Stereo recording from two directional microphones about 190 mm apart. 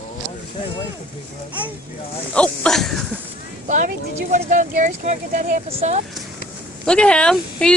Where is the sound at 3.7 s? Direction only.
40° right (ahead or behind).